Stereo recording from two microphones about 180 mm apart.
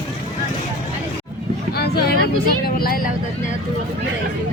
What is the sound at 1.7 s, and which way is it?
Vehicle, 60° left (ahead or behind).